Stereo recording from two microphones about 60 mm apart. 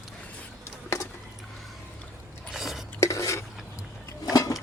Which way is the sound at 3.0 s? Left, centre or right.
Left.